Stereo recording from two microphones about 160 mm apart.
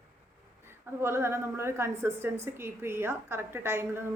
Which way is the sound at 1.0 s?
15° right (ahead or behind).